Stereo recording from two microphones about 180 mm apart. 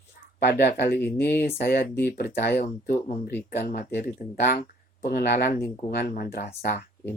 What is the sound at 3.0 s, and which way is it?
Speech, 45° left (ahead or behind).